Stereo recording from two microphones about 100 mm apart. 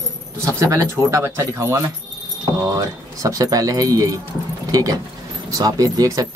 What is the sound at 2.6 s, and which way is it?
Speech, 35° right (ahead or behind).